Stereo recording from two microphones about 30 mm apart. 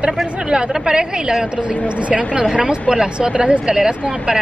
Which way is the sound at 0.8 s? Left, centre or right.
Right.